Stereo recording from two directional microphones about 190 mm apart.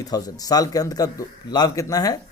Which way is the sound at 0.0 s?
20° left (ahead or behind).